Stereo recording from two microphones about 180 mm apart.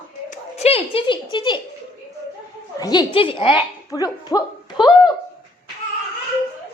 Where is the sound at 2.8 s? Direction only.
20° left (ahead or behind).